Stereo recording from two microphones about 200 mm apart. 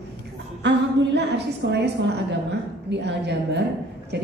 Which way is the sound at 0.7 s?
60° right (ahead or behind).